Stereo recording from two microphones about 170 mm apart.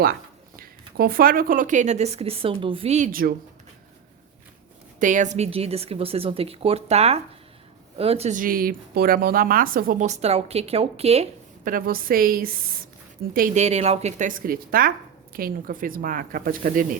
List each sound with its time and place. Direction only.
0.0 s speech: 60° right (ahead or behind); by 3.1 s 40° right (ahead or behind)
3.1 s speech: 60° right (ahead or behind)
4.9 s a woman's voice: 50° right (ahead or behind)
11.6 s speech: 55° right (ahead or behind)